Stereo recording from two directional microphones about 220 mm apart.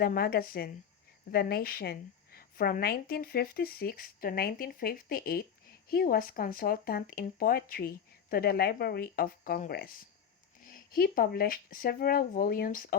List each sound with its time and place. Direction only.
0.0 s a woman's voice: 45° left (ahead or behind)